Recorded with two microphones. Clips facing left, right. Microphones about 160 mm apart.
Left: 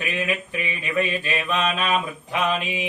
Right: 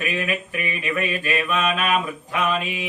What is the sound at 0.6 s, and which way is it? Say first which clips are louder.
Mantra: left 2 dB; 25° left (ahead or behind).